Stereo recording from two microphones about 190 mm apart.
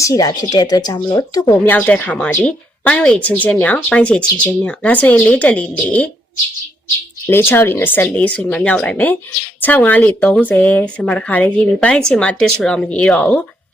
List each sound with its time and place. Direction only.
0.0 s speech: 20° left (ahead or behind)
1.7 s a woman's voice: 10° left (ahead or behind)
7.3 s a woman's voice: 10° left (ahead or behind)